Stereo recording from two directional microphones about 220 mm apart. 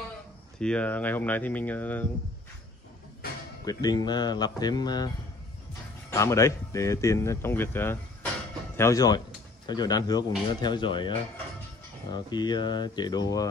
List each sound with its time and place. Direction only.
0.6 s a man's voice: 5° left (ahead or behind)
3.6 s a man's voice: 20° left (ahead or behind)